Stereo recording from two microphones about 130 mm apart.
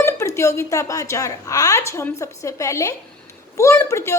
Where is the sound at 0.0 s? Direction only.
25° left (ahead or behind).